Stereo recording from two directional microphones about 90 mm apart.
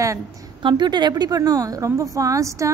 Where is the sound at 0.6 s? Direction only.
60° right (ahead or behind).